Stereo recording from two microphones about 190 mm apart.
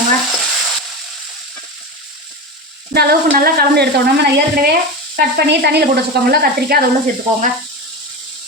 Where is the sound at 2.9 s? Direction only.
50° right (ahead or behind).